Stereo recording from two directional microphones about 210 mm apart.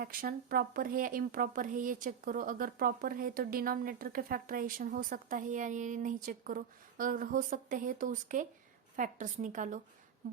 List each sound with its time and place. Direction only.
0.0 s speech: 45° right (ahead or behind)